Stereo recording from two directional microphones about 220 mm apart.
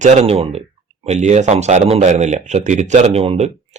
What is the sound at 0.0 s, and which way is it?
Speech, 30° right (ahead or behind).